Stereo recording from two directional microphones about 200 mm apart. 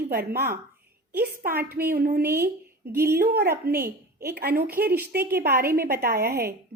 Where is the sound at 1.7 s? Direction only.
50° right (ahead or behind).